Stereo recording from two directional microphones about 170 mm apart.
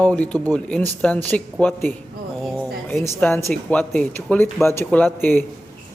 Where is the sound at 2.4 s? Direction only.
Centre (ahead or behind).